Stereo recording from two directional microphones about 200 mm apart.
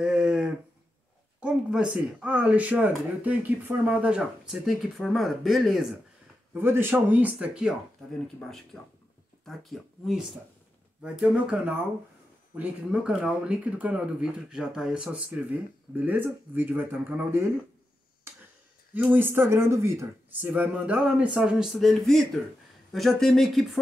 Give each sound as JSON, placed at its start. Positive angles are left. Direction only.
{"t": 0.0, "sound": "a sound", "side_deg": -5}
{"t": 1.4, "sound": "speech", "side_deg": -5}
{"t": 6.5, "sound": "speech", "side_deg": -10}
{"t": 18.9, "sound": "speech", "side_deg": -10}